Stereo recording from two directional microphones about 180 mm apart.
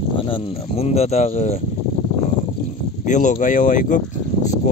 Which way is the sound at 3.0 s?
45° left (ahead or behind).